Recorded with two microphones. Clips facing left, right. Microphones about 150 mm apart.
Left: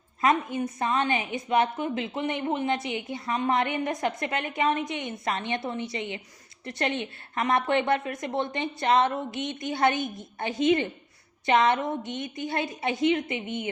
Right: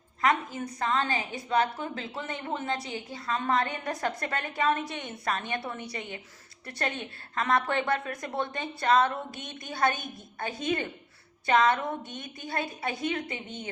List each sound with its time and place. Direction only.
0.2 s a woman's voice: 20° left (ahead or behind)